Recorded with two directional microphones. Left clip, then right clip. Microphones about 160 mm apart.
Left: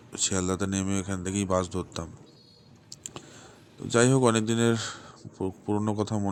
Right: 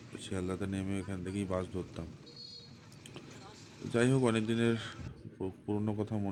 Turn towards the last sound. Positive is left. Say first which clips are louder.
# left 8 dB
turn(degrees=30)  # may be behind; listen again after turning